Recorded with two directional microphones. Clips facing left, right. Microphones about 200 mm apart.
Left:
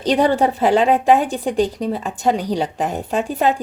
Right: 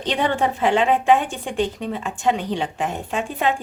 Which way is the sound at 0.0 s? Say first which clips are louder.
Left 6 dB; 40° left (ahead or behind).